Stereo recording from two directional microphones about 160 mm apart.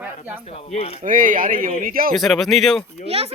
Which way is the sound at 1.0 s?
55° right (ahead or behind).